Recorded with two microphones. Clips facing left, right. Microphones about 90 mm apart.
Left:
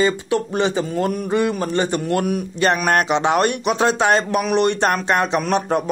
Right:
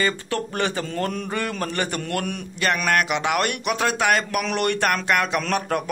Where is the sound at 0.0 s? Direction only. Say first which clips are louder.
Left 6 dB; 20° left (ahead or behind).